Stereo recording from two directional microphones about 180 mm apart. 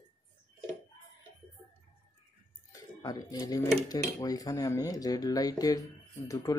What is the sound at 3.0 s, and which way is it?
Speech, 20° left (ahead or behind).